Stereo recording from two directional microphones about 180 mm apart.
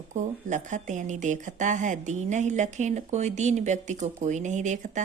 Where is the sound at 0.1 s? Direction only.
40° right (ahead or behind).